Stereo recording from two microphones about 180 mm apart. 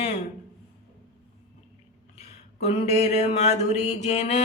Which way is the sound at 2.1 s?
35° left (ahead or behind).